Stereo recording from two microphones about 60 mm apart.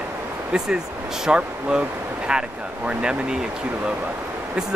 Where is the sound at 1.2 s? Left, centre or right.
Centre.